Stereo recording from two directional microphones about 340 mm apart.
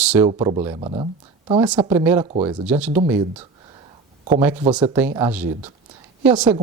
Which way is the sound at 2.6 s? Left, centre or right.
Centre.